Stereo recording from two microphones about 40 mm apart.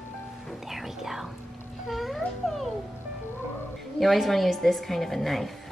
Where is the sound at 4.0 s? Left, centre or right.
Centre.